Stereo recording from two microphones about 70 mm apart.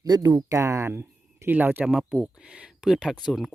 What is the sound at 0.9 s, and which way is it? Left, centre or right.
Speech, right.